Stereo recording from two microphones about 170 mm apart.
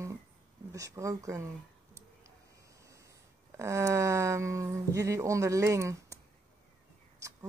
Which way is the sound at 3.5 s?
15° right (ahead or behind).